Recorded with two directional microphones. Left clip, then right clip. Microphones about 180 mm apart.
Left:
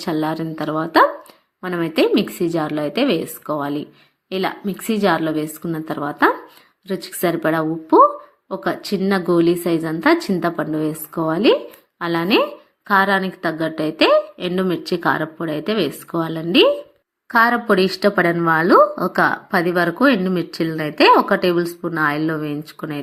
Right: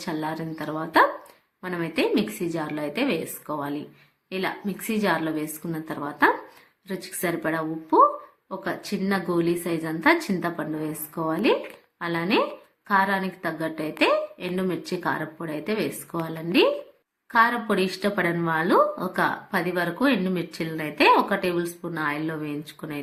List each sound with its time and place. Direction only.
0.0 s a woman's voice: 35° left (ahead or behind)